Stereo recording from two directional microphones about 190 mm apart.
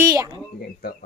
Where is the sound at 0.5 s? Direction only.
55° left (ahead or behind).